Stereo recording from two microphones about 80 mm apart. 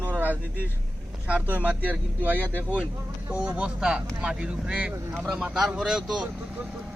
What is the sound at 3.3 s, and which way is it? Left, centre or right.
Speech, centre.